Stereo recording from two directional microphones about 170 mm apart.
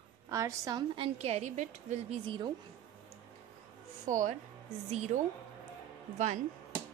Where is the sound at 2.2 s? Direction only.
30° right (ahead or behind).